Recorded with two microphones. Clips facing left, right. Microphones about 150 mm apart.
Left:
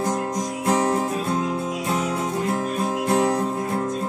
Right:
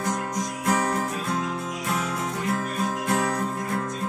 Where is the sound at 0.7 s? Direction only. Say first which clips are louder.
Left 4 dB; 25° left (ahead or behind).